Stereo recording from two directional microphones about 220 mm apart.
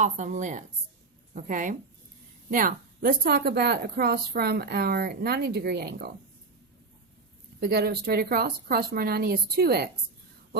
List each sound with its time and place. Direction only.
0.0 s a woman's voice: 35° right (ahead or behind)
7.6 s a woman's voice: 45° right (ahead or behind)